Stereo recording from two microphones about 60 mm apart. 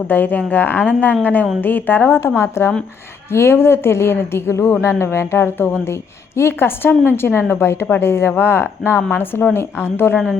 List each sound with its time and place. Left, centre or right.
0.1 s a woman's voice: left